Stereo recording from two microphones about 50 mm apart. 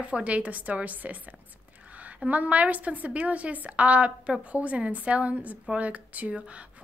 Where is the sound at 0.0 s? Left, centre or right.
Right.